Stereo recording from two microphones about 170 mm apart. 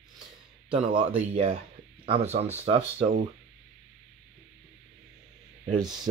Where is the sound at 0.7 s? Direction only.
30° right (ahead or behind).